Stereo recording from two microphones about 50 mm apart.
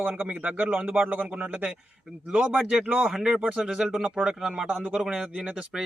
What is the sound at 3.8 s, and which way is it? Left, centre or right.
Speech, centre.